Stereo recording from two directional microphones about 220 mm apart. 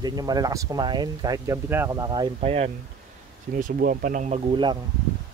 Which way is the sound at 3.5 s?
40° right (ahead or behind).